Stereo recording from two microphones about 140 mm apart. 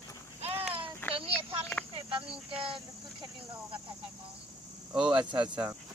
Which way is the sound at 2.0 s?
40° right (ahead or behind).